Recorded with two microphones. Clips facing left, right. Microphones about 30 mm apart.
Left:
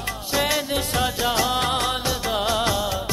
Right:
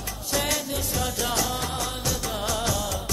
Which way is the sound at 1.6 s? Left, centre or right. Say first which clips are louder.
Left 7 dB; left.